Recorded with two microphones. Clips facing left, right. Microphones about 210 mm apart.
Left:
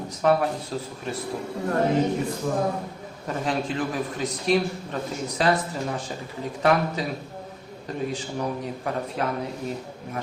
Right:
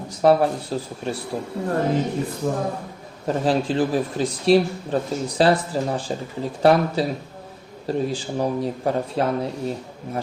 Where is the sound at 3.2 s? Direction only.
30° right (ahead or behind).